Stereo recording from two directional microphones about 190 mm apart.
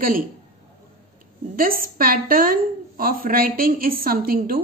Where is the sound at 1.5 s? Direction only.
50° right (ahead or behind).